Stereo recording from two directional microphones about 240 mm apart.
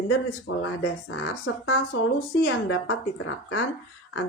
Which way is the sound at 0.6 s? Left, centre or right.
Left.